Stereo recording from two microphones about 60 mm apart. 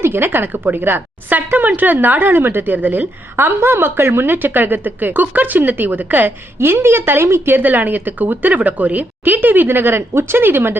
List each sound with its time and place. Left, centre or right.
0.0 s a woman's voice: right
3.3 s a woman's voice: right